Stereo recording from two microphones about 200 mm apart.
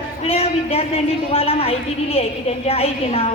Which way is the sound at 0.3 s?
30° left (ahead or behind).